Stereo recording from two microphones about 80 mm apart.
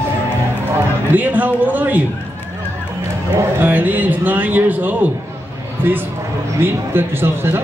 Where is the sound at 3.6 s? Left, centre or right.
Right.